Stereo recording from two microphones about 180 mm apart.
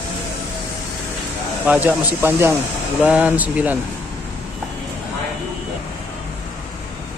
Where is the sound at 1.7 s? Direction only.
10° right (ahead or behind).